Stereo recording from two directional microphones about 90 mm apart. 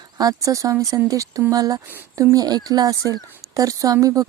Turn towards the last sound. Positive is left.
turn(degrees=-40)  # may be behind; listen again after turning